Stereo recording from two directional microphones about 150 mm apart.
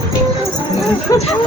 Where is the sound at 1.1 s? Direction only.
25° left (ahead or behind).